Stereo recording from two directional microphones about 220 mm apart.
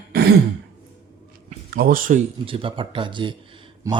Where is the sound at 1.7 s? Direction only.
40° right (ahead or behind).